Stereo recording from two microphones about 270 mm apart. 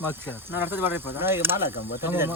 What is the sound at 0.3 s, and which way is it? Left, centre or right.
Speech, centre.